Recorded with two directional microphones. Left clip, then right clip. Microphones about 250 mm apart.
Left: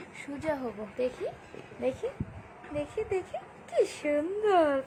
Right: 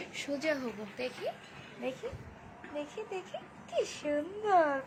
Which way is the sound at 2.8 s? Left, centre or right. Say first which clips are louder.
Left 7 dB; left.